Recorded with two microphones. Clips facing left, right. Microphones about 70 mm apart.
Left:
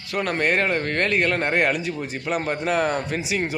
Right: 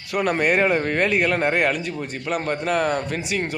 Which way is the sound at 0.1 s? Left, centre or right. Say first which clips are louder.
Right 2 dB; centre.